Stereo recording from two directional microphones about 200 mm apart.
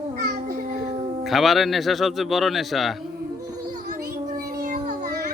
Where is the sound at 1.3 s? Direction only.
Centre (ahead or behind).